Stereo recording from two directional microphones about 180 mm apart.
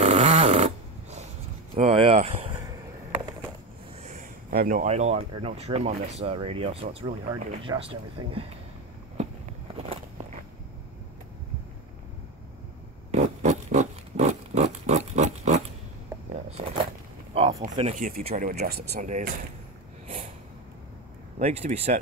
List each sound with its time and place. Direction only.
0.0 s snoring: 35° right (ahead or behind)
1.8 s a sound: 35° right (ahead or behind)
4.0 s speech: 45° right (ahead or behind)
9.8 s biting: 35° right (ahead or behind)
13.1 s a sound: 40° right (ahead or behind)
17.9 s speech: 50° right (ahead or behind)
21.4 s speech: 40° right (ahead or behind)